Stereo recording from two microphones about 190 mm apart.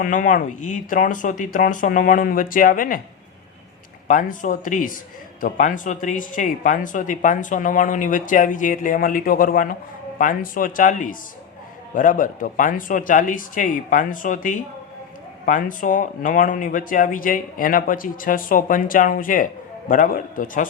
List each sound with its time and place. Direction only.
0.0 s speech: 45° left (ahead or behind)
4.1 s speech: 45° left (ahead or behind)